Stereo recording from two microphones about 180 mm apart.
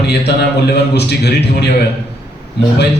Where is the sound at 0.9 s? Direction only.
65° left (ahead or behind).